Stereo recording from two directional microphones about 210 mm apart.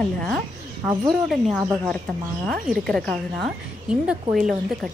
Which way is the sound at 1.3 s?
Centre (ahead or behind).